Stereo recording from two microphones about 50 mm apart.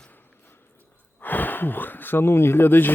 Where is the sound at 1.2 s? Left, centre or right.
Left.